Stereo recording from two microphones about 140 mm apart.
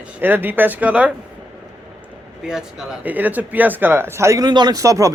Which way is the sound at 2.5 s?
5° right (ahead or behind).